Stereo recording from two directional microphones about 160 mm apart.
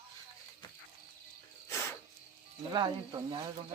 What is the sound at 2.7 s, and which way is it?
Speech, 30° right (ahead or behind).